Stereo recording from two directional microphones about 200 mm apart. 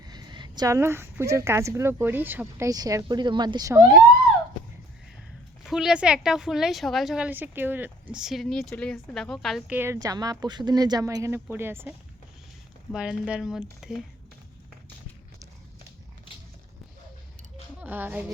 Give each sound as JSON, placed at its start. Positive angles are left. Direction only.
{"t": 0.0, "sound": "a woman's voice", "side_deg": -20}
{"t": 5.6, "sound": "a woman's voice", "side_deg": 0}
{"t": 17.7, "sound": "a woman's voice", "side_deg": -10}